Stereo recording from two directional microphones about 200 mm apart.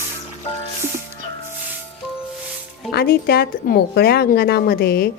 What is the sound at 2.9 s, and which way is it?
Speech, 50° left (ahead or behind).